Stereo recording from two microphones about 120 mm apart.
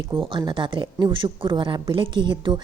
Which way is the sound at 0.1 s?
40° right (ahead or behind).